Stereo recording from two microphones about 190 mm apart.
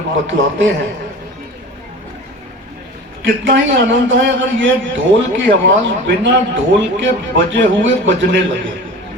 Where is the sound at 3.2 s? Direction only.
80° right.